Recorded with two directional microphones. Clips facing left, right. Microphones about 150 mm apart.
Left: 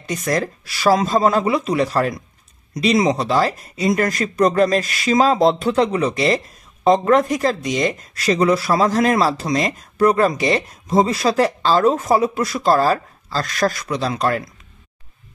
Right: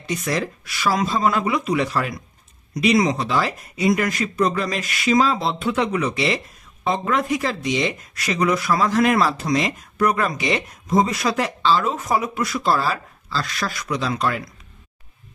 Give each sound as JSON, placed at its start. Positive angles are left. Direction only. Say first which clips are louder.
{"t": 0.0, "sound": "speech", "louder": "left 3 dB", "side_deg": 45}
{"t": 2.7, "sound": "speech", "louder": "left 1 dB", "side_deg": 25}
{"t": 8.1, "sound": "speech", "louder": "left 6 dB", "side_deg": 30}